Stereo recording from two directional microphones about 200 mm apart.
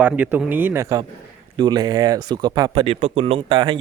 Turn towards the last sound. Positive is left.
turn(degrees=-25)  # may be behind; listen again after turning